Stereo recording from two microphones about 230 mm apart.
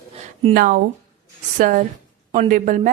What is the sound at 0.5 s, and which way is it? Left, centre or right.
Speech, right.